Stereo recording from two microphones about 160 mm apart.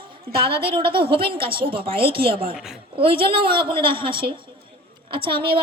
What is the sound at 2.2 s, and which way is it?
Speech, 70° right (ahead or behind).